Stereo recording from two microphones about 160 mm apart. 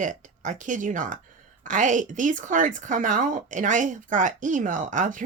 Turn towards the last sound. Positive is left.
turn(degrees=-55)  # may be behind; listen again after turning